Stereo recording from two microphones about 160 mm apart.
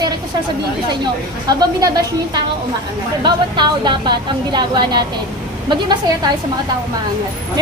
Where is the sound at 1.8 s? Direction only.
25° right (ahead or behind).